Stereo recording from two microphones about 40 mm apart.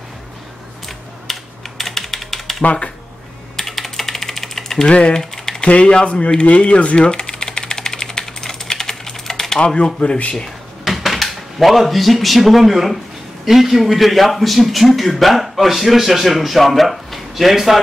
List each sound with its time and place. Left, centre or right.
0.8 s ratchet: centre
2.6 s speech: left
3.5 s typing: centre
4.8 s speech: left
5.2 s typing: centre
5.7 s typing: left; by 9.6 s centre
9.6 s speech: left
10.8 s a man's voice: centre